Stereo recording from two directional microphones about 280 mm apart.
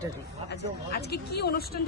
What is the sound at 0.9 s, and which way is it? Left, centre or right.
Speech, left.